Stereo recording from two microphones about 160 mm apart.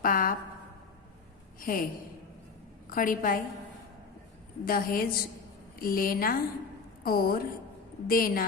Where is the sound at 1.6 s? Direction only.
60° left (ahead or behind).